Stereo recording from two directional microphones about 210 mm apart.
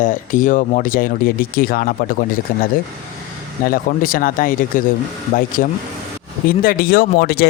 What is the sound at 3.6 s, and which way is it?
Speech, 45° left (ahead or behind).